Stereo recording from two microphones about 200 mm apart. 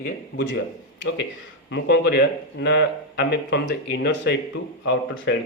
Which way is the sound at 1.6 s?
60° left (ahead or behind).